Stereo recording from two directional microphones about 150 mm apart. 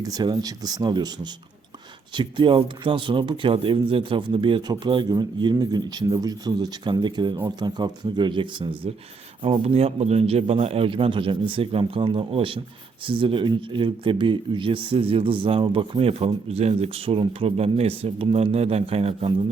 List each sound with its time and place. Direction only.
0.0 s speech: 25° right (ahead or behind)